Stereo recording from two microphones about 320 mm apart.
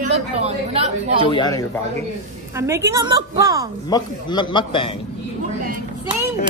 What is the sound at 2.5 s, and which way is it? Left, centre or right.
A woman's voice, centre.